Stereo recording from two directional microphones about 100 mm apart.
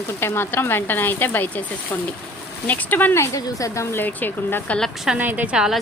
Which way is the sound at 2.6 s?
15° left (ahead or behind).